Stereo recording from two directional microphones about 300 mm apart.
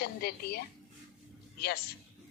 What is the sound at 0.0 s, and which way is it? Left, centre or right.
Speech, left.